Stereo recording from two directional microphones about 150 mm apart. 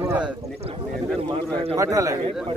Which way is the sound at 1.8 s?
20° right (ahead or behind).